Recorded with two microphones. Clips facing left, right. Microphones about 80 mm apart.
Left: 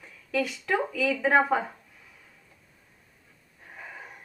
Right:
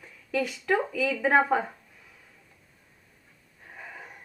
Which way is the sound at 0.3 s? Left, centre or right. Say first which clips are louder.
Right 1 dB; centre.